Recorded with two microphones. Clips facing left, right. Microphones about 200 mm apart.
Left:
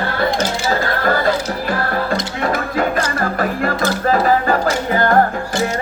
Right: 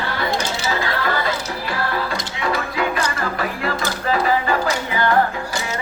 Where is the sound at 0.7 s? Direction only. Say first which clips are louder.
Left 4 dB; 45° left (ahead or behind).